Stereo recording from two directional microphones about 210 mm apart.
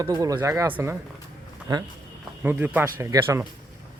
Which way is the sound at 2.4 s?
10° right (ahead or behind).